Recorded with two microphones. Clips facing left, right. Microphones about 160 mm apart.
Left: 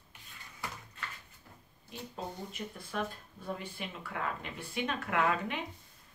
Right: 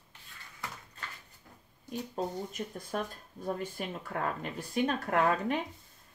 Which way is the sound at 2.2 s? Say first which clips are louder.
Right 5 dB; 45° right (ahead or behind).